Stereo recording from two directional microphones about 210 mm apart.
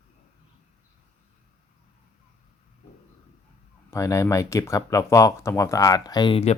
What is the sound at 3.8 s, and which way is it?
Speech, 15° left (ahead or behind).